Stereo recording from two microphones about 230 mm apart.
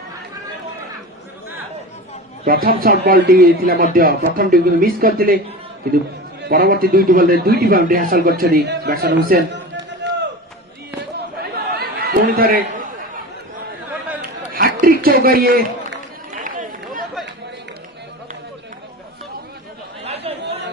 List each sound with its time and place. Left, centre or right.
2.4 s speech: right
6.4 s a man's voice: right
11.5 s chatter: right
14.2 s a sound: right
16.4 s run: right
20.1 s chatter: right